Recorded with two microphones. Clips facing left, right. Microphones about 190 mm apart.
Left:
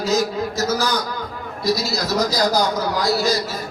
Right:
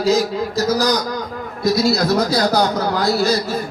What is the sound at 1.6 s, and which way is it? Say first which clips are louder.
Speech: right 5 dB; 60° right (ahead or behind).